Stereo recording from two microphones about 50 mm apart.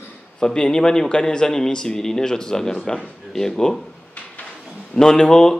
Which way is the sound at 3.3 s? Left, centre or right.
Centre.